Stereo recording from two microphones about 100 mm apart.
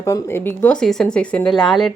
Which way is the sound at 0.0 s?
25° left (ahead or behind).